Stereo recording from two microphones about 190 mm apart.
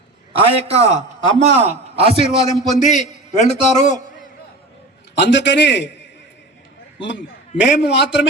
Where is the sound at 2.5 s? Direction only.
40° left (ahead or behind).